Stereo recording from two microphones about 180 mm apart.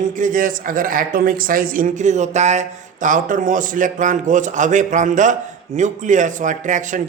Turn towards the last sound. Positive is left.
turn(degrees=-45)  # may be behind; listen again after turning